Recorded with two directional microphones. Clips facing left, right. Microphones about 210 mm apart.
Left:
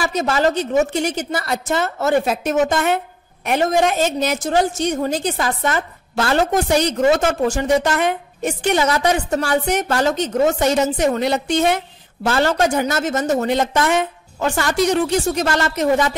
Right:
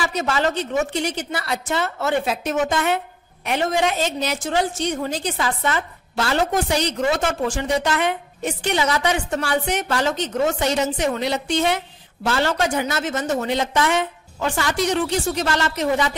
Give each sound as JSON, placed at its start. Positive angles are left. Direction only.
{"t": 0.0, "sound": "a woman's voice", "side_deg": 40}